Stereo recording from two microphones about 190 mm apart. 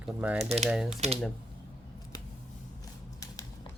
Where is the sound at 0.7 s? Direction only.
5° right (ahead or behind).